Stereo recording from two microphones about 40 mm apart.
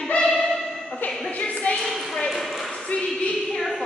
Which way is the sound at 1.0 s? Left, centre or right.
Left.